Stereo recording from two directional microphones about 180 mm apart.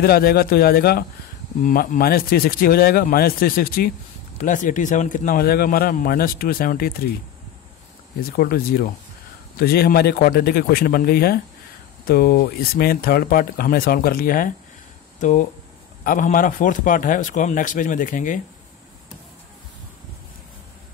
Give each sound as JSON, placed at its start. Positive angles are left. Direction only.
{"t": 0.0, "sound": "a man's voice", "side_deg": 55}
{"t": 8.2, "sound": "a man's voice", "side_deg": 55}